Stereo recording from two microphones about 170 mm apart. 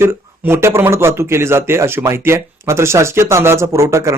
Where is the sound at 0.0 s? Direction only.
15° right (ahead or behind).